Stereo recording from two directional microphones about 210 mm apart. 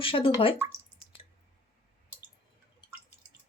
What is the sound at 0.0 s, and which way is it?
Speech, 25° left (ahead or behind).